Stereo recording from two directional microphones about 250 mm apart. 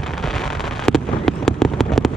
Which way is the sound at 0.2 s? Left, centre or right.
Centre.